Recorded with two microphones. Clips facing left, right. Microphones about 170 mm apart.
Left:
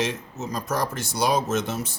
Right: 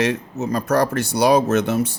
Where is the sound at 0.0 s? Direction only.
60° right (ahead or behind).